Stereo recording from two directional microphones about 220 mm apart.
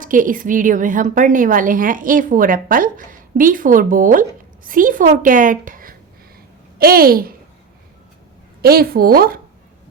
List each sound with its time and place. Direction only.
0.0 s a woman's voice: 35° right (ahead or behind)
8.6 s speech: 45° right (ahead or behind)